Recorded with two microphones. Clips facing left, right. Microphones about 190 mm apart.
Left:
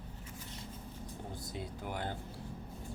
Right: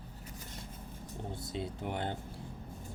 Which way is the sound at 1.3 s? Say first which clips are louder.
Right 6 dB; 25° right (ahead or behind).